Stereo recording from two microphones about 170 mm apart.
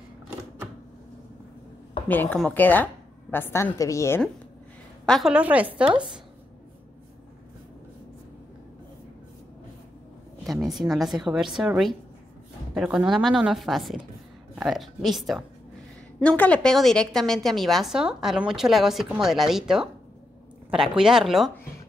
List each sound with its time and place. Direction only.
2.0 s a woman's voice: 10° left (ahead or behind)
5.0 s a woman's voice: 5° left (ahead or behind)
5.3 s a woman's voice: 10° right (ahead or behind)
5.9 s speech: 30° right (ahead or behind)
10.4 s a sound: centre (ahead or behind)
10.9 s a woman's voice: centre (ahead or behind)